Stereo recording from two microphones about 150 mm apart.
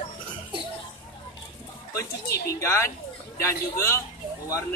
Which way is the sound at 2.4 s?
20° left (ahead or behind).